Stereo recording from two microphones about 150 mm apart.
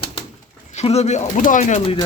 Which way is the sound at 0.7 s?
45° left (ahead or behind).